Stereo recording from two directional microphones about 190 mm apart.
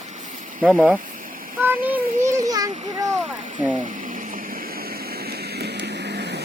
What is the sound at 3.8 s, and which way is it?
Vehicle, 45° right (ahead or behind).